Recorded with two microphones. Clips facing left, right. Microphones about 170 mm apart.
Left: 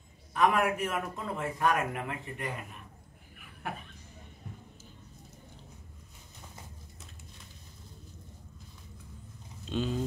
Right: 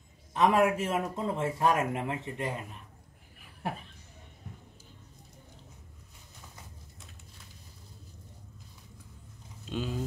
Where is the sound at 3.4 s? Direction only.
30° right (ahead or behind).